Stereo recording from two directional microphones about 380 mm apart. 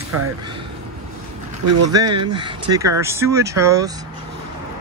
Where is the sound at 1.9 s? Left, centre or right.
Centre.